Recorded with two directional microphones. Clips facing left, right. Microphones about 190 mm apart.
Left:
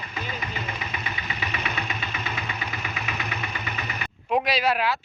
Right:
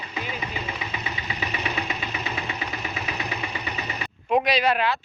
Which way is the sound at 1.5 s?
20° right (ahead or behind).